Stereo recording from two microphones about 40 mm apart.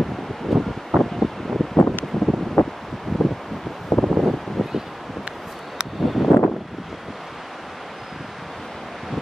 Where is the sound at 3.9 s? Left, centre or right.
Centre.